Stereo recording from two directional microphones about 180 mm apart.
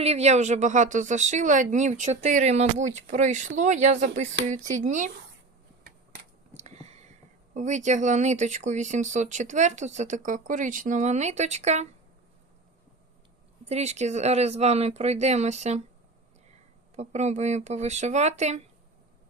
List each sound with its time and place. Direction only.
0.0 s speech: 35° right (ahead or behind)
6.5 s a sound: 40° right (ahead or behind)
7.5 s speech: 40° right (ahead or behind)
13.7 s speech: 35° right (ahead or behind)
16.9 s speech: 40° right (ahead or behind)